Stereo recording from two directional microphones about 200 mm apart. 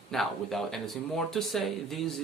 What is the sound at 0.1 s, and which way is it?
Speech, centre (ahead or behind).